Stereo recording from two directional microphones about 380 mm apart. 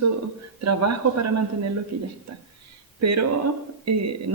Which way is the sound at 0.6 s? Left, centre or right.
Right.